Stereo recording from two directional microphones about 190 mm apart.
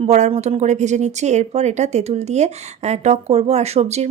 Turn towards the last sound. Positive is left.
turn(degrees=-35)  # may be behind; listen again after turning